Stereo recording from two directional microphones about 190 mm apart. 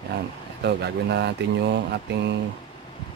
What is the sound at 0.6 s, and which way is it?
Speech, 60° right (ahead or behind).